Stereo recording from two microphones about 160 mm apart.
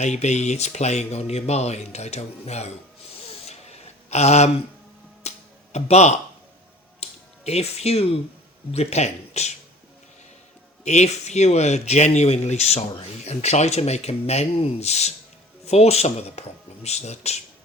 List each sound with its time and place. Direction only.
0.0 s speech: 45° left (ahead or behind)
3.2 s a sound: 40° left (ahead or behind)
5.7 s speech: 45° left (ahead or behind)
7.0 s a sound: 40° left (ahead or behind)
8.7 s speech: 40° left (ahead or behind)
10.8 s speech: 45° left (ahead or behind)